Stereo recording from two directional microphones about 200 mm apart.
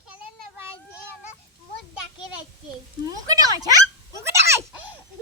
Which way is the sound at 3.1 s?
20° right (ahead or behind).